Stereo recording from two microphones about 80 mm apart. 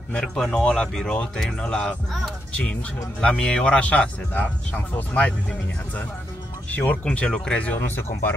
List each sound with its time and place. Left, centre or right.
0.1 s a man's voice: centre; by 8.4 s left